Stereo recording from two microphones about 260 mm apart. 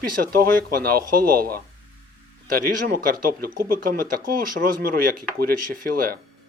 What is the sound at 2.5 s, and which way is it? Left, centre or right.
Speech, right.